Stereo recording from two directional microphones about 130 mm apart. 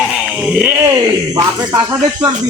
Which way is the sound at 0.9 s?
30° right (ahead or behind).